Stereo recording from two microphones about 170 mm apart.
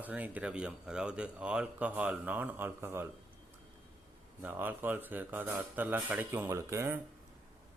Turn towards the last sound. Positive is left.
turn(degrees=-15)  # may be behind; listen again after turning